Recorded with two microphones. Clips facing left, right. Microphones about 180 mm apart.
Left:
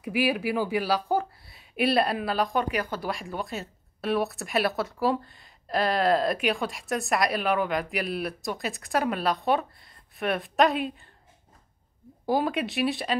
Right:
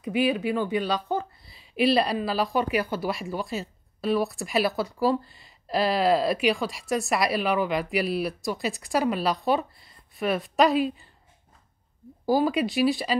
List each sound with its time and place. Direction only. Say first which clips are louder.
0.0 s speech: right 2 dB; 10° left (ahead or behind)
12.3 s speech: right 3 dB; centre (ahead or behind)